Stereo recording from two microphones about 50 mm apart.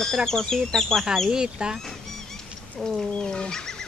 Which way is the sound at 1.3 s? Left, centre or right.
Centre.